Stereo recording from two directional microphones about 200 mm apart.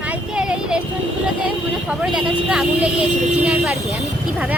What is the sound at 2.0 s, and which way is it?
Vehicle, 5° right (ahead or behind).